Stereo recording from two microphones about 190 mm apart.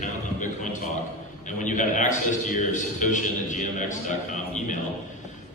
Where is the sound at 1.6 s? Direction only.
40° left (ahead or behind).